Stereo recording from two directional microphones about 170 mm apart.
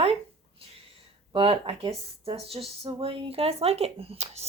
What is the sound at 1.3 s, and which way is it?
Speech, 35° right (ahead or behind).